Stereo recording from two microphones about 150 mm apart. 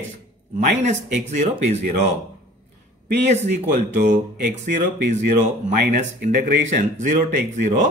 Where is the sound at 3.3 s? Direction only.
50° right (ahead or behind).